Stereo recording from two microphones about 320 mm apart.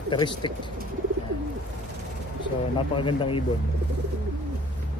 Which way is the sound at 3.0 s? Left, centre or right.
Centre.